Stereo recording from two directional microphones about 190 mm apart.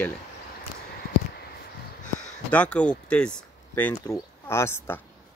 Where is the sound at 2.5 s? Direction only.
5° left (ahead or behind).